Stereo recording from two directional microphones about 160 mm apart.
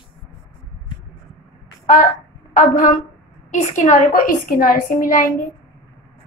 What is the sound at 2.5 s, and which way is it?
A woman's voice, 50° left (ahead or behind).